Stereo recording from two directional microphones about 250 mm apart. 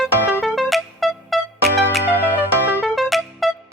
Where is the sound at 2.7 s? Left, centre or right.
Centre.